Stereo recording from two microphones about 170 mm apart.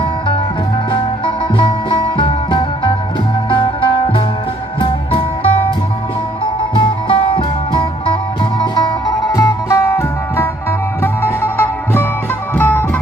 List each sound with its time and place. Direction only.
0.9 s music: 30° left (ahead or behind)
6.7 s music: 30° left (ahead or behind); by 13.0 s 10° left (ahead or behind)